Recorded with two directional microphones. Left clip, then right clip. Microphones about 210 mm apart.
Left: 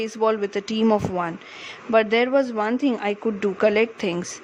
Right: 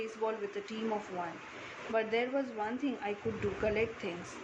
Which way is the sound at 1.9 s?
55° left (ahead or behind).